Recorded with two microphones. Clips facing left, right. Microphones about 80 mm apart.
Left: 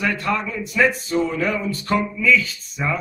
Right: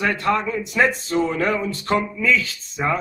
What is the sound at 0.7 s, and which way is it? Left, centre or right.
A man's voice, right.